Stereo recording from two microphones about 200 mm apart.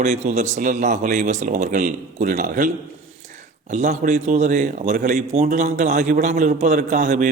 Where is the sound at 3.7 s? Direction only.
35° right (ahead or behind).